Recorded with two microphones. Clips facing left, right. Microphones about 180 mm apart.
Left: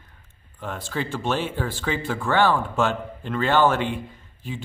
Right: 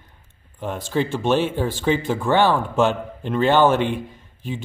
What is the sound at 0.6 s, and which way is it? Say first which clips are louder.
Speech: right 6 dB; 20° right (ahead or behind).